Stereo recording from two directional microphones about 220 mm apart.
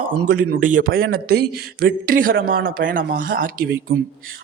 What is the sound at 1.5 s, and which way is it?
Speech, 45° right (ahead or behind).